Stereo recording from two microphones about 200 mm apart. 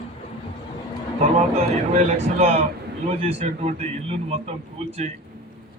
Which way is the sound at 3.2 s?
30° right (ahead or behind).